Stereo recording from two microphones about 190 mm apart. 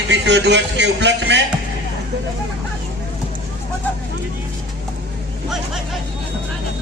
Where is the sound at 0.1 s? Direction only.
65° right (ahead or behind).